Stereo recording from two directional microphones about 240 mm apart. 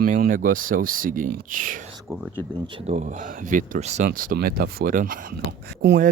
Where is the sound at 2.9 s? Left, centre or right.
Right.